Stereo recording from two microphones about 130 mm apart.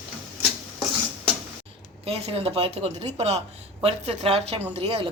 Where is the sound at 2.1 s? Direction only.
50° right (ahead or behind).